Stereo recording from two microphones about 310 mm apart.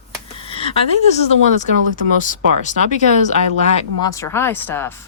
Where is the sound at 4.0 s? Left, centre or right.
Centre.